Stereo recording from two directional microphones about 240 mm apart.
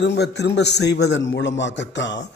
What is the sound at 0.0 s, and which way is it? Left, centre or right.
A man's voice, left.